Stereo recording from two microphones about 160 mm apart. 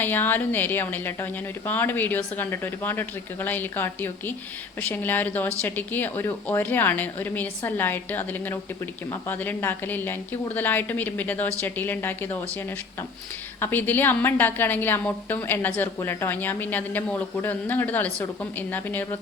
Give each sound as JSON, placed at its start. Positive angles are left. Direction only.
{"t": 0.0, "sound": "a woman's voice", "side_deg": 10}
{"t": 13.6, "sound": "a woman's voice", "side_deg": 10}